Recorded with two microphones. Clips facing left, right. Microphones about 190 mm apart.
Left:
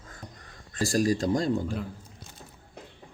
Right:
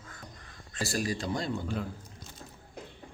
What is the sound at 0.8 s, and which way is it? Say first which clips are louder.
Speech: left 7 dB; 45° left (ahead or behind).